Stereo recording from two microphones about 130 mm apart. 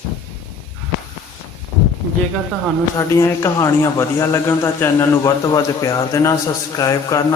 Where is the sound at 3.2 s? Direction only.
25° left (ahead or behind).